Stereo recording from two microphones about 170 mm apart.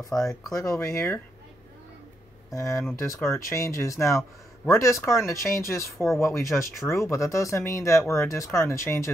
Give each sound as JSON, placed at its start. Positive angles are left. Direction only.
{"t": 0.1, "sound": "speech", "side_deg": 5}
{"t": 0.5, "sound": "speech", "side_deg": 15}
{"t": 2.5, "sound": "speech", "side_deg": 15}